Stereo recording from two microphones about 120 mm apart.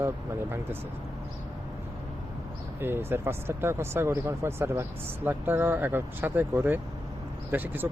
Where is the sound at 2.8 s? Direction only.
20° right (ahead or behind).